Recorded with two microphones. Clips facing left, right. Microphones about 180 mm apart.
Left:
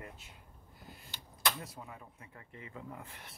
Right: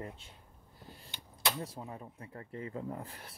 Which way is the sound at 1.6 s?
30° right (ahead or behind).